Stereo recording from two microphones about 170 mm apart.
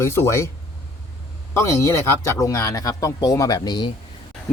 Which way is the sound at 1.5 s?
15° left (ahead or behind).